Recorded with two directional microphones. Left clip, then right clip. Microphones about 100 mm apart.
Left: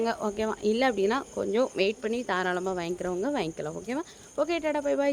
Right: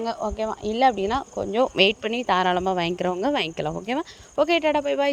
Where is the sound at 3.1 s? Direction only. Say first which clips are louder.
Right 6 dB; 80° right.